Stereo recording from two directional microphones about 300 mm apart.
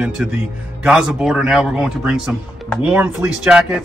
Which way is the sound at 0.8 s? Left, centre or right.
Centre.